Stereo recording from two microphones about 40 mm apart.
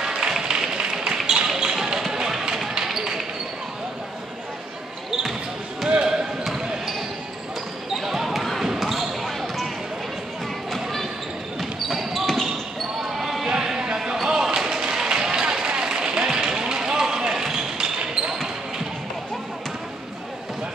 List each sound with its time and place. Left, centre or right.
0.0 s a sound: right
1.6 s music: right
2.9 s basketball bounce: centre
5.9 s basketball bounce: right
8.0 s basketball bounce: centre
10.7 s basketball bounce: centre
13.5 s music: centre
14.3 s a sound: centre
15.2 s run: centre